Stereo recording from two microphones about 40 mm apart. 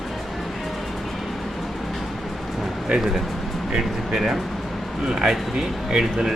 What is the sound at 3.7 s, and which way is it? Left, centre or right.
Speech, centre.